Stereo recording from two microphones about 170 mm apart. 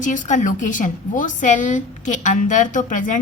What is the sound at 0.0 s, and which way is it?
A woman's voice, 50° left (ahead or behind).